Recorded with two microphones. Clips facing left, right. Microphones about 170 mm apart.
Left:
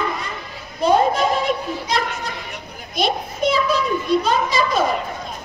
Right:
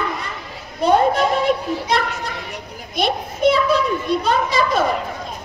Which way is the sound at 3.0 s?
60° right (ahead or behind).